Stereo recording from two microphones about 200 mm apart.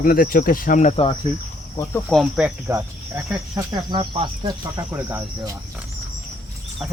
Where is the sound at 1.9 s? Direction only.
Centre (ahead or behind).